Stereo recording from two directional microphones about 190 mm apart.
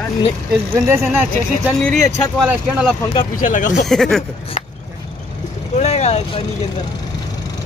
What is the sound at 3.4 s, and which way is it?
Speech, 45° left (ahead or behind).